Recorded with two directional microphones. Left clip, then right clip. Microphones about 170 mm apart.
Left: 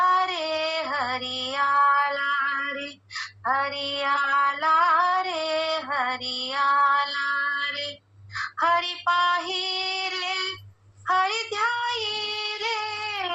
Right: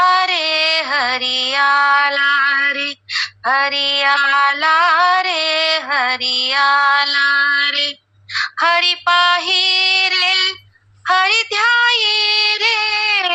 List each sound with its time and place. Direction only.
0.0 s music: 25° right (ahead or behind)
0.9 s female singing: 25° right (ahead or behind)
11.1 s child singing: 25° right (ahead or behind)